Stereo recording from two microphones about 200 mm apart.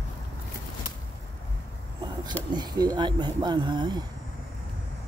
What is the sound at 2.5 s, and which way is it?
Speech, 20° right (ahead or behind).